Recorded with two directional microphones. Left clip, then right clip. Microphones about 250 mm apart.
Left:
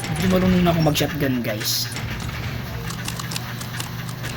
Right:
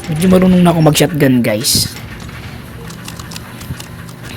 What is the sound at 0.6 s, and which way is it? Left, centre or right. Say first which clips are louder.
Speech: right 9 dB; right.